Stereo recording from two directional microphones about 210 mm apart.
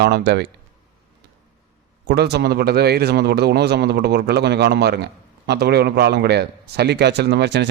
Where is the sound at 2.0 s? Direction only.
50° right (ahead or behind).